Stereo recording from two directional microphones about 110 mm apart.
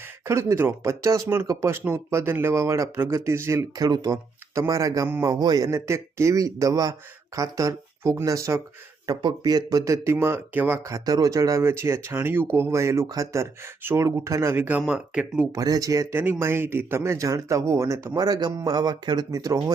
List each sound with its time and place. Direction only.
0.3 s speech: 25° right (ahead or behind)
10.8 s speech: 30° right (ahead or behind); by 15.4 s 10° right (ahead or behind)
15.5 s speech: 35° right (ahead or behind)
16.1 s speech: 20° right (ahead or behind)
18.1 s speech: 40° right (ahead or behind)